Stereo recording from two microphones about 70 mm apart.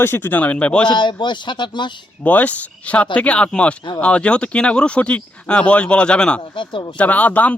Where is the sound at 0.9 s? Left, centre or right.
Left.